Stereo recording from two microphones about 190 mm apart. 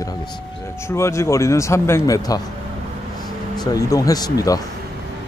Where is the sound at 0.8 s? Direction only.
15° left (ahead or behind).